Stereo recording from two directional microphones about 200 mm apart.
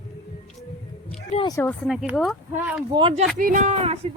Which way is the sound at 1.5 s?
15° left (ahead or behind).